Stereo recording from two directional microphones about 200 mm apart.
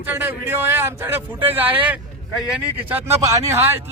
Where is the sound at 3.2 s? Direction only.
15° right (ahead or behind).